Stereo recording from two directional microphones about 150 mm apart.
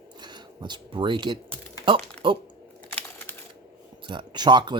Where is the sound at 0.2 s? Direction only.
30° right (ahead or behind).